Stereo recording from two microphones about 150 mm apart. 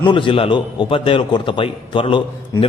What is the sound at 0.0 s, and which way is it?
A man's voice, 35° left (ahead or behind).